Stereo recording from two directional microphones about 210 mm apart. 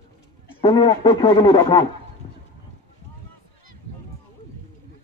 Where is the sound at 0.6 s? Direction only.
20° left (ahead or behind).